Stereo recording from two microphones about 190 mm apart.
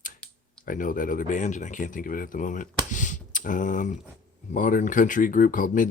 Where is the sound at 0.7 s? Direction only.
45° left (ahead or behind).